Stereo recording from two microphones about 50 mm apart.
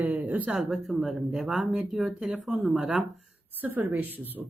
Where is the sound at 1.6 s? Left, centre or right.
Centre.